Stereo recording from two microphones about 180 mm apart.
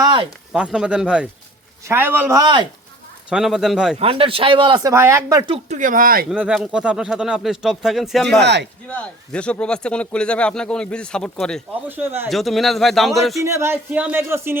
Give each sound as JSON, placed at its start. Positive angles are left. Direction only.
{"t": 0.0, "sound": "a sound", "side_deg": -25}
{"t": 0.5, "sound": "speech", "side_deg": -5}
{"t": 3.2, "sound": "speech", "side_deg": -5}
{"t": 3.9, "sound": "speech", "side_deg": -30}
{"t": 5.5, "sound": "speech", "side_deg": -40}
{"t": 6.3, "sound": "speech", "side_deg": -5}
{"t": 8.4, "sound": "speech", "side_deg": -70}
{"t": 8.9, "sound": "speech", "side_deg": 5}
{"t": 11.9, "sound": "speech", "side_deg": -10}
{"t": 12.3, "sound": "speech", "side_deg": 0}
{"t": 13.4, "sound": "speech", "side_deg": -15}